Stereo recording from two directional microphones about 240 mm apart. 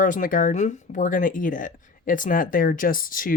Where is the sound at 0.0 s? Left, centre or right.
Left.